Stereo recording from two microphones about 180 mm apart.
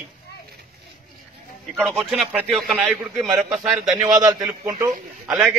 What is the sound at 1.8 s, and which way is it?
A man's voice, centre (ahead or behind).